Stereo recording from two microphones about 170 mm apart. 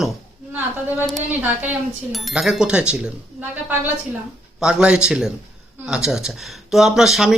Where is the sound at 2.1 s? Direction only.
Centre (ahead or behind).